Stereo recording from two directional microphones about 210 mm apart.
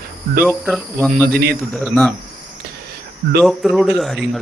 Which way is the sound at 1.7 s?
Centre (ahead or behind).